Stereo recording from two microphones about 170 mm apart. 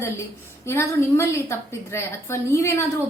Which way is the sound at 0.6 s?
15° left (ahead or behind).